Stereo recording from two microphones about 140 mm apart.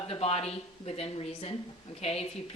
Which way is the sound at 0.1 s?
45° left (ahead or behind).